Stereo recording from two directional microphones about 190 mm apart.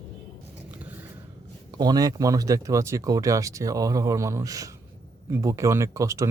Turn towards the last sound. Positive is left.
turn(degrees=-15)  # may be behind; listen again after turning